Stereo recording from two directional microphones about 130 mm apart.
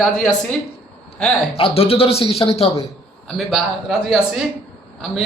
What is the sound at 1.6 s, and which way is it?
Speech, 50° left (ahead or behind).